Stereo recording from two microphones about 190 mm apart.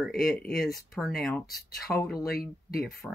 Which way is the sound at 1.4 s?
55° left (ahead or behind).